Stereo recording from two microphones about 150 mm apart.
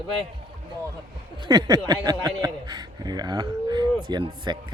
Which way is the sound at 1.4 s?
30° right (ahead or behind).